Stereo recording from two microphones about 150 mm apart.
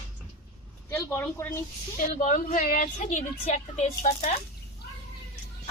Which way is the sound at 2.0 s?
60° left (ahead or behind).